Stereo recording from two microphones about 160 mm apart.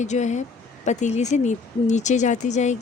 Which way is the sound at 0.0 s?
45° left (ahead or behind).